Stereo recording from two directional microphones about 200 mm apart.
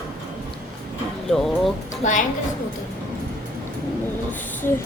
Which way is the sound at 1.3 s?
Centre (ahead or behind).